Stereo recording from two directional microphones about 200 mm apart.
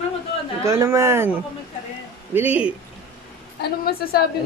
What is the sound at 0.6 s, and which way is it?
Speech, 15° right (ahead or behind).